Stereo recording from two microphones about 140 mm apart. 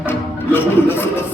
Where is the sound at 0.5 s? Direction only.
15° left (ahead or behind).